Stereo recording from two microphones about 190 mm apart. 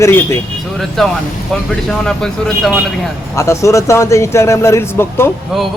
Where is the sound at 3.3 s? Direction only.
15° left (ahead or behind).